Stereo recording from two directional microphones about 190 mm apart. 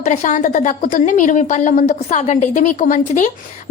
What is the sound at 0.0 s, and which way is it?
A woman's voice, 40° left (ahead or behind).